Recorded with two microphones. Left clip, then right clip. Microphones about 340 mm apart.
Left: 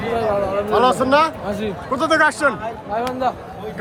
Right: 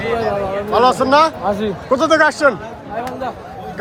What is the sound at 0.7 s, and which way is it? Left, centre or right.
A man's voice, centre.